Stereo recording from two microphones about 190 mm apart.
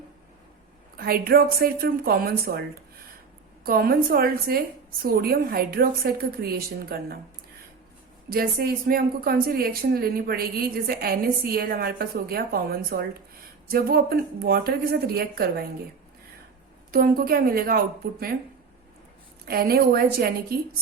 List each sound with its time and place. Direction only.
0.9 s speech: 50° right (ahead or behind)
8.3 s speech: 50° right (ahead or behind)
16.9 s speech: 50° right (ahead or behind)
19.5 s speech: 55° right (ahead or behind)